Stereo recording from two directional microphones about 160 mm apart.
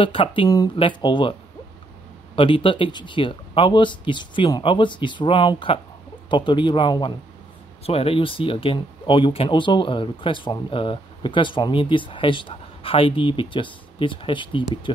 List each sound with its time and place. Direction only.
0.0 s speech: 35° left (ahead or behind)
2.3 s a man's voice: 35° left (ahead or behind)